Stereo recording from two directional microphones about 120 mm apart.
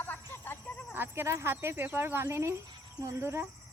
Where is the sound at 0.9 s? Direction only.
20° right (ahead or behind).